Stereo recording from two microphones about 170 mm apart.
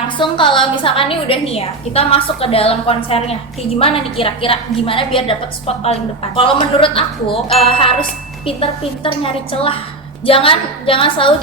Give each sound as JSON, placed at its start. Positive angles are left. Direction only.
{"t": 0.2, "sound": "a woman's voice", "side_deg": 30}
{"t": 9.2, "sound": "a woman's voice", "side_deg": 30}